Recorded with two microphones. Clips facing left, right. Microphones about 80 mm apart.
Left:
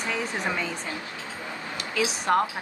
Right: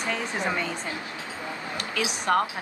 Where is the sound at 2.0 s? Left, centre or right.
Centre.